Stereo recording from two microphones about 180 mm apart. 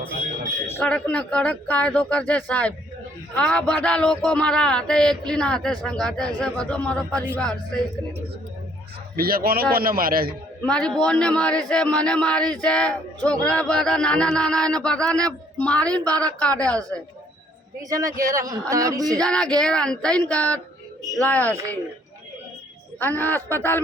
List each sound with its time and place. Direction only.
0.7 s a man's voice: 10° left (ahead or behind)
9.1 s a man's voice: 55° right (ahead or behind)
10.7 s a man's voice: 5° left (ahead or behind)
17.8 s speech: 20° right (ahead or behind)
19.2 s a man's voice: 5° left (ahead or behind)
23.0 s speech: 10° left (ahead or behind)